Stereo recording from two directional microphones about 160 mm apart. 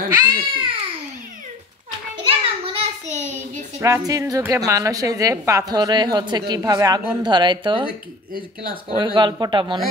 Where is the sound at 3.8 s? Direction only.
20° right (ahead or behind).